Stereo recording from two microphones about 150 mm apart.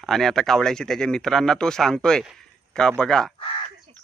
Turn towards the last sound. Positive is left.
turn(degrees=35)  # may be behind; listen again after turning